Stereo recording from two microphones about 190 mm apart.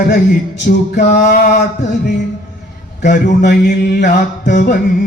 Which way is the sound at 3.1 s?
60° left (ahead or behind).